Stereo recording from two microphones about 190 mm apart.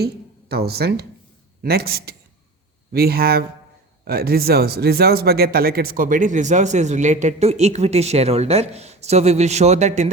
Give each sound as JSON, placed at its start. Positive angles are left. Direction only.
{"t": 0.0, "sound": "speech", "side_deg": -55}